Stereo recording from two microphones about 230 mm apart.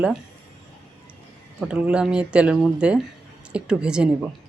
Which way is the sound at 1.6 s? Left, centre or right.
Centre.